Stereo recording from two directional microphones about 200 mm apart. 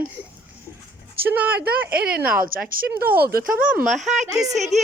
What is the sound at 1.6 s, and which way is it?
A woman's voice, 50° right (ahead or behind).